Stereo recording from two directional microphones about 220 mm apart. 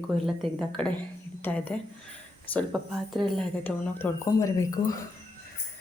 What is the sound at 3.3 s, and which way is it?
Speech, 10° left (ahead or behind).